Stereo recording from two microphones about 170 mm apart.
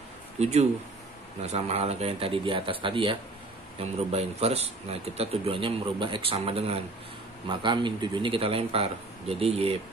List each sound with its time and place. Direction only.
0.4 s speech: 40° right (ahead or behind)